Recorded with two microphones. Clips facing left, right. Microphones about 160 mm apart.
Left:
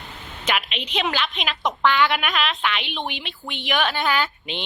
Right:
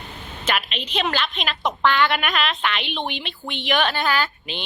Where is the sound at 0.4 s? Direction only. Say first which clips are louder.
Even; 15° left (ahead or behind).